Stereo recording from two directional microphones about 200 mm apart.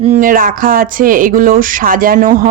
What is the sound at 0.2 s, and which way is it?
Speech, 45° right (ahead or behind).